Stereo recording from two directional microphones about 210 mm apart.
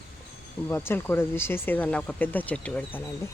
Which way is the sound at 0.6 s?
10° left (ahead or behind).